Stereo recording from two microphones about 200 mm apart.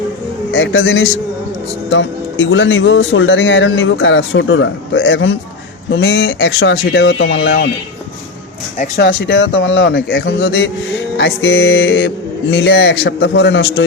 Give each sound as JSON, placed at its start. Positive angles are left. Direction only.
{"t": 0.5, "sound": "speech", "side_deg": 65}
{"t": 9.0, "sound": "speech", "side_deg": 65}